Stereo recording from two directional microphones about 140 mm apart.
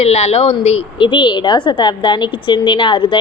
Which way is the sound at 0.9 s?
35° left (ahead or behind).